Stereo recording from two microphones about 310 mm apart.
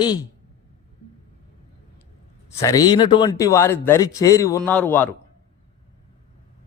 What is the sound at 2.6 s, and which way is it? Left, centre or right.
Speech, centre.